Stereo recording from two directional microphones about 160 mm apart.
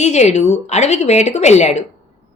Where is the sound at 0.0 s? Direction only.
45° left (ahead or behind).